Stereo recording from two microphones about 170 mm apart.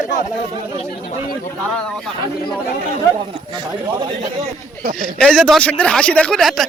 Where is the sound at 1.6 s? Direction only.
5° left (ahead or behind).